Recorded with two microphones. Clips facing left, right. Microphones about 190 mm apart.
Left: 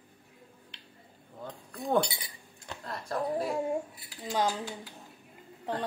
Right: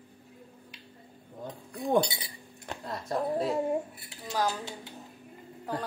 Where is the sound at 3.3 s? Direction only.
Centre (ahead or behind).